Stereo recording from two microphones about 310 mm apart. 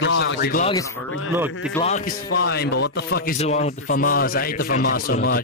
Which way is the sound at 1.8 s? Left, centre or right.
Left.